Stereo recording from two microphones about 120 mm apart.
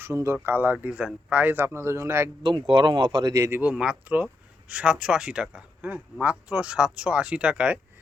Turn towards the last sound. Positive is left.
turn(degrees=-10)  # may be behind; listen again after turning